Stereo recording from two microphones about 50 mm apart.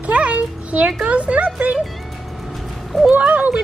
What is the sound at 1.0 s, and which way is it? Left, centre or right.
Speech, right.